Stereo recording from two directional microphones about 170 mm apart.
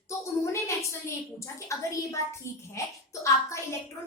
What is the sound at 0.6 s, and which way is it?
A woman's voice, 15° left (ahead or behind).